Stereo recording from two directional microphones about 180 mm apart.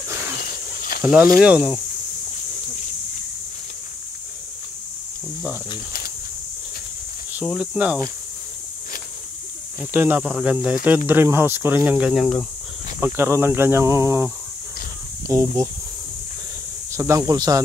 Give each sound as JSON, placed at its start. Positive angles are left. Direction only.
{"t": 0.4, "sound": "a sound", "side_deg": 55}
{"t": 1.3, "sound": "speech", "side_deg": -5}
{"t": 7.3, "sound": "speech", "side_deg": -5}
{"t": 9.8, "sound": "speech", "side_deg": -10}
{"t": 13.0, "sound": "speech", "side_deg": -15}
{"t": 16.9, "sound": "speech", "side_deg": -15}